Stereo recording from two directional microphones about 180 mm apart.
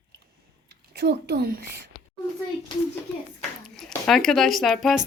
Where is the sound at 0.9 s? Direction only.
65° right (ahead or behind).